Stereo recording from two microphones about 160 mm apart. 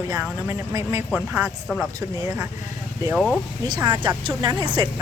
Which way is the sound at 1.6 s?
5° right (ahead or behind).